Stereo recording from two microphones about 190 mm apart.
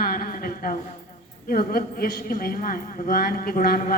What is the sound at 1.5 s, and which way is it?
A woman's voice, 50° left (ahead or behind).